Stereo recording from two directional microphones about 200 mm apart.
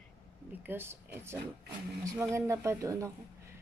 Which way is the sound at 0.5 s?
10° right (ahead or behind).